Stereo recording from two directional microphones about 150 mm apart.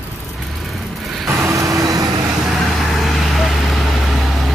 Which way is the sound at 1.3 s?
20° right (ahead or behind).